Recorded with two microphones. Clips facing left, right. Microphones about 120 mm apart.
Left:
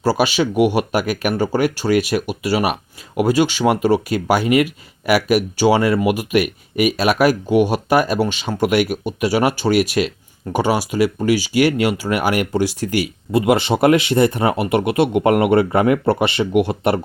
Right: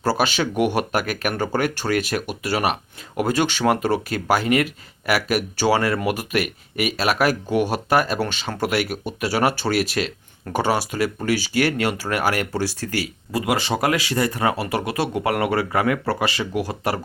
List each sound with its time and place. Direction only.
0.0 s speech: 15° left (ahead or behind)